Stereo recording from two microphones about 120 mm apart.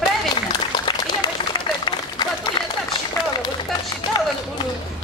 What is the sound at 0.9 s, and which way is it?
Run, 35° left (ahead or behind).